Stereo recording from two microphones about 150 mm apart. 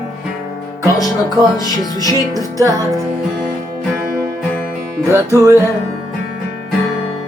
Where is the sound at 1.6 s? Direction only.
25° left (ahead or behind).